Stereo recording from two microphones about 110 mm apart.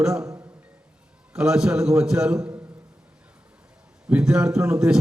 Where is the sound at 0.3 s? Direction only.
30° right (ahead or behind).